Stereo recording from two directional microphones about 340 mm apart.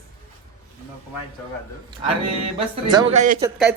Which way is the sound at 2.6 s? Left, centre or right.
Centre.